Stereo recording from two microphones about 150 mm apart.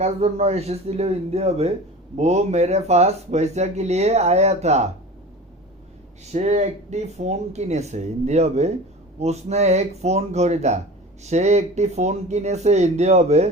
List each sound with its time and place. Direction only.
0.0 s speech: 45° right (ahead or behind)
6.3 s speech: 50° right (ahead or behind)